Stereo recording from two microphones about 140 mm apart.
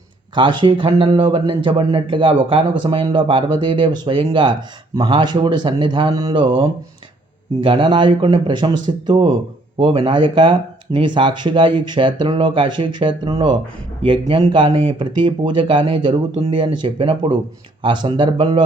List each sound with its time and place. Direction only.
0.3 s speech: 35° right (ahead or behind)